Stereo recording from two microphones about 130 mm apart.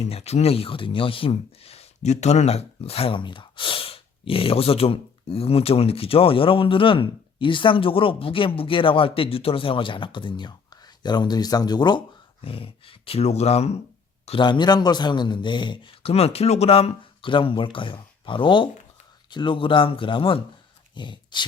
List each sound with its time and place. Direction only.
0.0 s a man's voice: 55° left (ahead or behind); by 12.0 s 35° left (ahead or behind)
12.5 s speech: 45° left (ahead or behind)
14.3 s a man's voice: 40° left (ahead or behind)